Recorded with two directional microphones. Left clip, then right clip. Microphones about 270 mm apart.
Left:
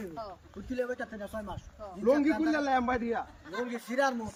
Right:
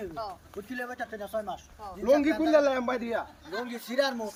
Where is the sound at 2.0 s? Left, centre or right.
Centre.